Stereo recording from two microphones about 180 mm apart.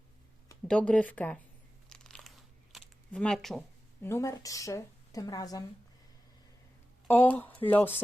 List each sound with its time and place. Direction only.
0.7 s a woman's voice: 5° left (ahead or behind)
1.9 s crunch: 5° left (ahead or behind)
2.7 s a sound: 5° left (ahead or behind)
4.0 s a woman's voice: 15° left (ahead or behind)
7.1 s a woman's voice: 10° left (ahead or behind)